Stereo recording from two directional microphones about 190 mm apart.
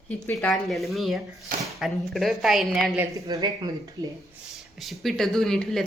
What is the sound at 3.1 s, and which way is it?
Speech, 20° right (ahead or behind).